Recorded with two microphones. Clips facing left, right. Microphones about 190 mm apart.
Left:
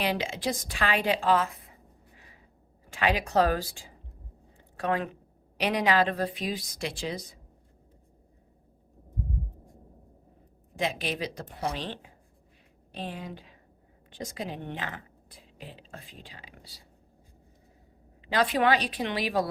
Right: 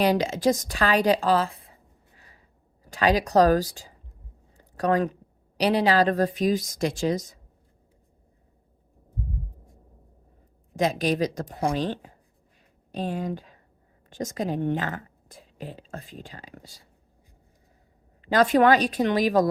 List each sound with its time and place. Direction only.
0.0 s a woman's voice: 40° right (ahead or behind)
2.8 s a woman's voice: 40° right (ahead or behind)
4.5 s a sound: 40° right (ahead or behind)
5.5 s speech: 35° right (ahead or behind)
10.8 s a woman's voice: 40° right (ahead or behind)
18.3 s speech: 45° right (ahead or behind)